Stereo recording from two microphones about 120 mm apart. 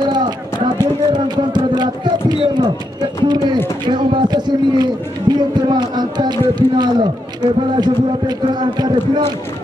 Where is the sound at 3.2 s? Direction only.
35° right (ahead or behind).